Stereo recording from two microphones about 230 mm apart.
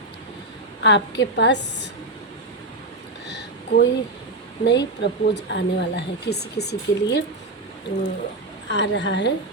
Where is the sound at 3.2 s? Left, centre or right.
Left.